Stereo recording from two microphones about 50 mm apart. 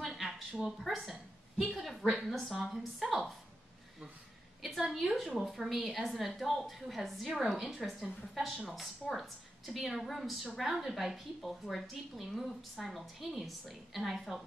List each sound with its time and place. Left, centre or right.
0.0 s a sound: centre
0.6 s a woman's voice: centre
4.6 s a woman's voice: centre